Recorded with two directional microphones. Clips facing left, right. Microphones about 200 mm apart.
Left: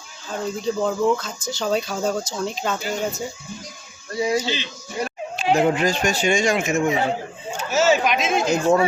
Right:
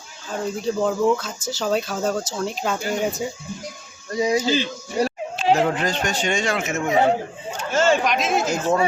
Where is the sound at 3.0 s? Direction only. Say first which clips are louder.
Right 2 dB; 15° right (ahead or behind).